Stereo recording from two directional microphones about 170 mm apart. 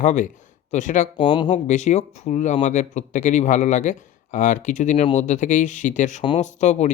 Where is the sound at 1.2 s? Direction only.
30° left (ahead or behind).